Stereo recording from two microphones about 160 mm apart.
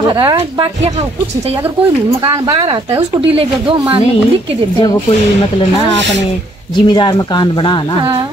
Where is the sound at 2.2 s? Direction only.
25° right (ahead or behind).